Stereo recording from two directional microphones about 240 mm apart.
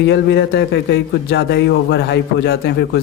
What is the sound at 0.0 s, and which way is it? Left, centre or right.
A man's voice, left.